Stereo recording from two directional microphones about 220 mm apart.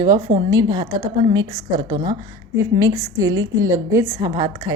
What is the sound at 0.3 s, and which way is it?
A woman's voice, 20° right (ahead or behind).